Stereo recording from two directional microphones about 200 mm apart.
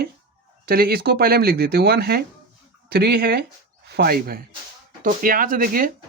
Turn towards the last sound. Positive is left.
turn(degrees=-45)  # may be behind; listen again after turning